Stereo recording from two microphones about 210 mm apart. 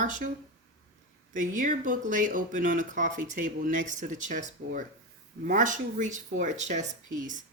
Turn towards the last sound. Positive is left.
turn(degrees=-40)  # may be behind; listen again after turning